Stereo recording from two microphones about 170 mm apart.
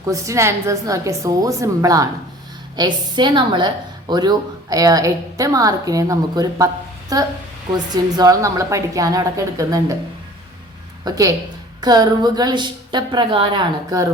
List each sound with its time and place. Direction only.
0.0 s a woman's voice: 20° right (ahead or behind)
7.7 s a woman's voice: 20° right (ahead or behind)
11.0 s a woman's voice: 20° right (ahead or behind)